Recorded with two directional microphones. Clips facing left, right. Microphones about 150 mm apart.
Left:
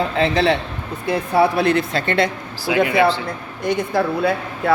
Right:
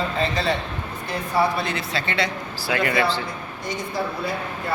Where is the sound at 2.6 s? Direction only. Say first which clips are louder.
Left 6 dB; 10° left (ahead or behind).